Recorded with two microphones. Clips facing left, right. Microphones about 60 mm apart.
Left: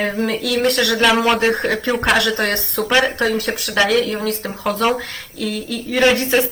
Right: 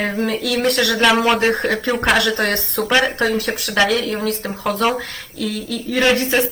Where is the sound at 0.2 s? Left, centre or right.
Left.